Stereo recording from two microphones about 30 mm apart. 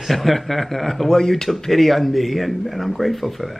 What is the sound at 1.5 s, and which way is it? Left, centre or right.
Speech, centre.